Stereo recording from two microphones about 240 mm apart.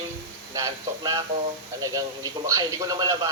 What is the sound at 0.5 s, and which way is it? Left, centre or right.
Speech, centre.